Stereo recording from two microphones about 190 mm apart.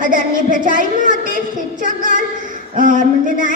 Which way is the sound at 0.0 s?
45° right (ahead or behind).